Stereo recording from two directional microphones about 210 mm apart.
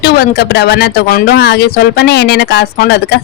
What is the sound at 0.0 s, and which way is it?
A woman's voice, 50° left (ahead or behind).